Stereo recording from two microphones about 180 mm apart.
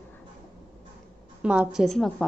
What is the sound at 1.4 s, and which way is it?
Speech, 5° right (ahead or behind).